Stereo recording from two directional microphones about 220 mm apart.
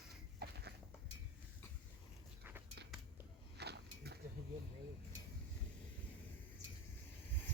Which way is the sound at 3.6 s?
50° right (ahead or behind).